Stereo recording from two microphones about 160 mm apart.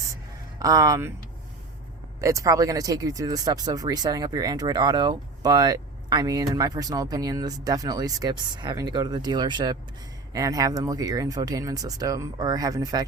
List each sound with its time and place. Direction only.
0.6 s speech: 20° right (ahead or behind)
2.2 s speech: 20° right (ahead or behind)